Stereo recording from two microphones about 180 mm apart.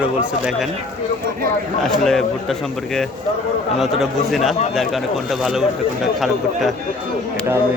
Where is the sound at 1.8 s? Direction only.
Centre (ahead or behind).